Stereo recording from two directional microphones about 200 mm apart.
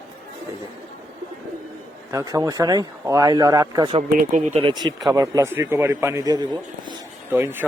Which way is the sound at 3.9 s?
35° right (ahead or behind).